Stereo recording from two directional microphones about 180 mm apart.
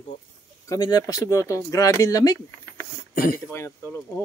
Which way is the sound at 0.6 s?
20° left (ahead or behind).